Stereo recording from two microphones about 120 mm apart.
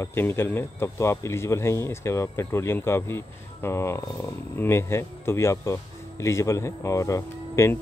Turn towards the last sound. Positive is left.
turn(degrees=20)  # may be behind; listen again after turning